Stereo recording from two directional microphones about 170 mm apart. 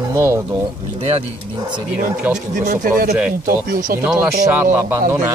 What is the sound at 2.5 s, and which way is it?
Speech, 50° right (ahead or behind).